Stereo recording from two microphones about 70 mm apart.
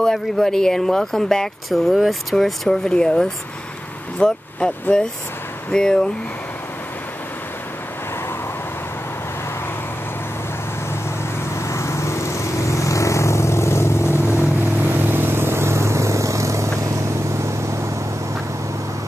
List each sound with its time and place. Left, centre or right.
0.0 s speech: centre
11.7 s vehicle: left
14.5 s vehicle: right